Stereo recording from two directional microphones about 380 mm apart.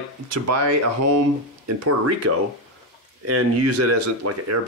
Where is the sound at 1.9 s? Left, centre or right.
Right.